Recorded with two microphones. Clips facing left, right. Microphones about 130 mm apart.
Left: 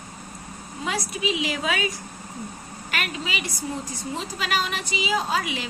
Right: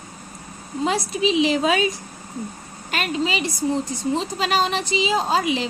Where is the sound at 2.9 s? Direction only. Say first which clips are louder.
Right 7 dB; 25° right (ahead or behind).